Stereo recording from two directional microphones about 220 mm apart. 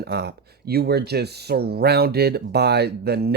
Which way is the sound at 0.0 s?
45° right (ahead or behind).